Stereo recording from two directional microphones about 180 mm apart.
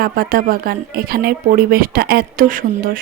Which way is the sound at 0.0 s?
55° right (ahead or behind).